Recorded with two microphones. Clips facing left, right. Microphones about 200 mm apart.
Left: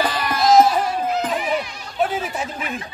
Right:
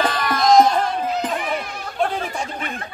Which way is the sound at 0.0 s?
10° left (ahead or behind).